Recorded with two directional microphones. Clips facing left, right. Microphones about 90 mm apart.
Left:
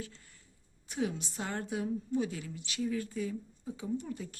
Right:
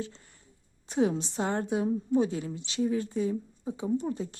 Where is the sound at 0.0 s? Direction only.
25° right (ahead or behind).